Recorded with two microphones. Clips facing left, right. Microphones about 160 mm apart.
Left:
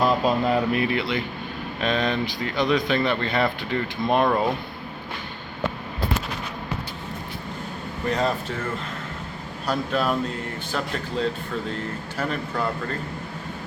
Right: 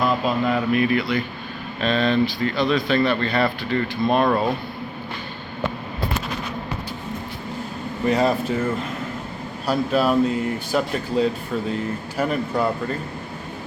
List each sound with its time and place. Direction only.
0.0 s mantra: 35° left (ahead or behind)
0.5 s speech: 25° left (ahead or behind)
8.0 s speech: 10° right (ahead or behind)
9.6 s speech: 5° right (ahead or behind)